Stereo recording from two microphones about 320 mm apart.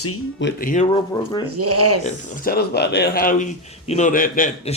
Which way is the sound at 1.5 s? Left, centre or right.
Right.